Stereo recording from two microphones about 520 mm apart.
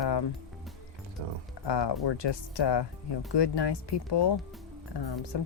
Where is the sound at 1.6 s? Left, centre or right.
Left.